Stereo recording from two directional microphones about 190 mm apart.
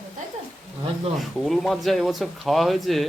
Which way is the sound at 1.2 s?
Centre (ahead or behind).